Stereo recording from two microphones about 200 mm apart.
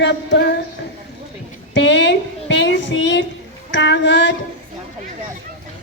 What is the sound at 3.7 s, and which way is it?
Music, 60° left (ahead or behind).